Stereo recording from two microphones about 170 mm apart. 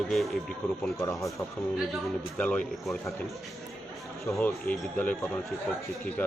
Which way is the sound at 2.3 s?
10° left (ahead or behind).